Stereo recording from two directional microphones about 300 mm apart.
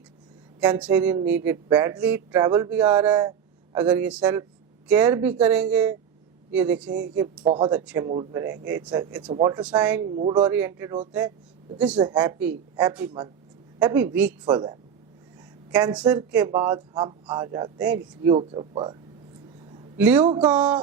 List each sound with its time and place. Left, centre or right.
0.6 s a woman's voice: centre
9.3 s speech: centre
9.6 s a woman's voice: centre
10.1 s a woman's voice: centre
20.0 s a woman's voice: centre